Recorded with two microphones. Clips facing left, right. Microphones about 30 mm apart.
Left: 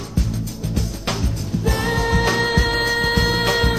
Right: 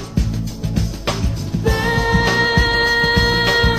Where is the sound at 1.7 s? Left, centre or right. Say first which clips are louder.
Right 4 dB; centre.